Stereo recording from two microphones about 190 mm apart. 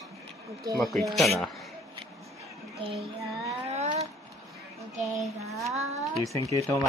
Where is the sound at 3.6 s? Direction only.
35° right (ahead or behind).